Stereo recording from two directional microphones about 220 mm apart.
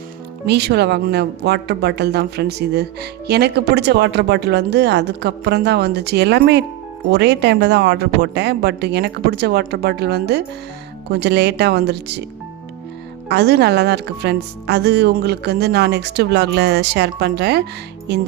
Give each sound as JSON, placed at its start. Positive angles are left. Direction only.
{"t": 0.4, "sound": "speech", "side_deg": -50}
{"t": 13.2, "sound": "speech", "side_deg": -50}